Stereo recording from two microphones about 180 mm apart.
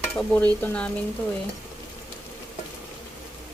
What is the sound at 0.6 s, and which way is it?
Speech, 5° left (ahead or behind).